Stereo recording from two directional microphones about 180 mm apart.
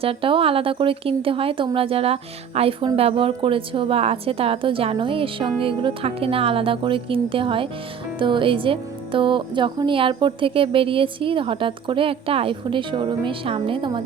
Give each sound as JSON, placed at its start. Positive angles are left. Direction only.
{"t": 0.0, "sound": "a woman's voice", "side_deg": -30}